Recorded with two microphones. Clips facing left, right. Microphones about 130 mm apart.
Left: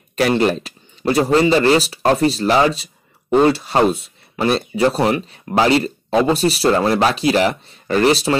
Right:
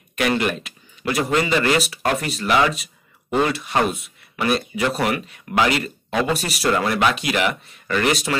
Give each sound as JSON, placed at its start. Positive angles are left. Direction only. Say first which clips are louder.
{"t": 0.1, "sound": "speech", "louder": "left 5 dB", "side_deg": 30}